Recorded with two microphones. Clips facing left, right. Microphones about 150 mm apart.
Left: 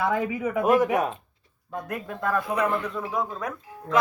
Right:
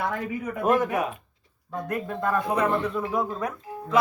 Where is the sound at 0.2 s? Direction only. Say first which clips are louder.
Left 4 dB; 90° left.